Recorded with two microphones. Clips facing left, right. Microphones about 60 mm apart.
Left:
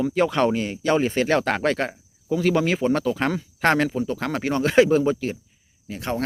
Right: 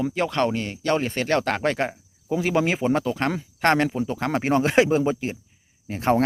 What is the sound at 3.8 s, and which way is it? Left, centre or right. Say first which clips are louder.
Speech: even; centre.